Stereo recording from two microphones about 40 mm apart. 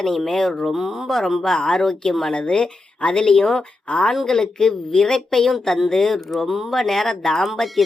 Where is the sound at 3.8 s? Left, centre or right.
Left.